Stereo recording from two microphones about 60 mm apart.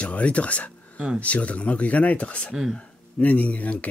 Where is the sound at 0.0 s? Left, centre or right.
Left.